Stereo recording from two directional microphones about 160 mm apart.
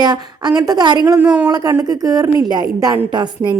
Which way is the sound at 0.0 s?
25° right (ahead or behind).